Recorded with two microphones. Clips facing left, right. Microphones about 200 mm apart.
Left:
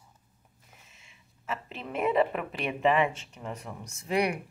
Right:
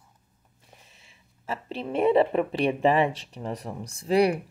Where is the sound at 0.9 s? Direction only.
35° right (ahead or behind).